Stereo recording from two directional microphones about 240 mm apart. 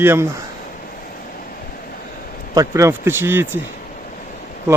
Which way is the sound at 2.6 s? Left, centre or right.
Centre.